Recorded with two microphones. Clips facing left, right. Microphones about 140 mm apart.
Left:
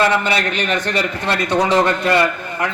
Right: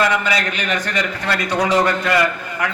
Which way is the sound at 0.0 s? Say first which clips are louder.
Left 2 dB; 30° left (ahead or behind).